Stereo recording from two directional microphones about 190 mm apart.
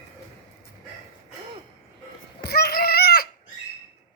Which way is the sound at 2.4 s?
55° left (ahead or behind).